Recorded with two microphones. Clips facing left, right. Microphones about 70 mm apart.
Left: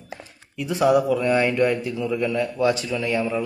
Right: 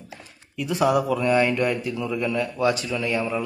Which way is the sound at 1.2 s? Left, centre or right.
Left.